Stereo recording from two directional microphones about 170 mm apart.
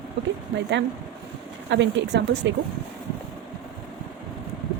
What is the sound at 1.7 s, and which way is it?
Speech, 90° right.